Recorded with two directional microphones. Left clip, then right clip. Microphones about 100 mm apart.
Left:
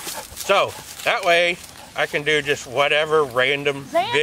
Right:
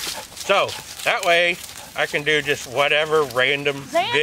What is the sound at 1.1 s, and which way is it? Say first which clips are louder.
Speech: even; 15° left (ahead or behind).